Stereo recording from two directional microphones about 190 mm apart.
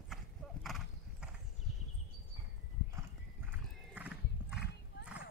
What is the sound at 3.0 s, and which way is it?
Horse, 10° right (ahead or behind).